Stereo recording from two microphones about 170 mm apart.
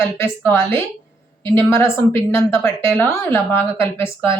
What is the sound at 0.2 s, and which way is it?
Speech, 15° left (ahead or behind).